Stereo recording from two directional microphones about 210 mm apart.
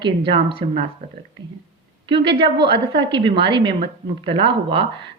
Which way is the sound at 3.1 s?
25° right (ahead or behind).